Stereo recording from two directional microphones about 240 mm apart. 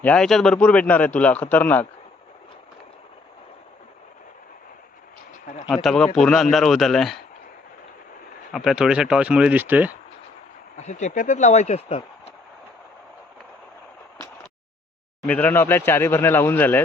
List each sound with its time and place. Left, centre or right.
0.0 s a man's voice: centre
5.7 s a man's voice: centre
8.5 s a man's voice: centre
10.8 s speech: left
15.3 s speech: centre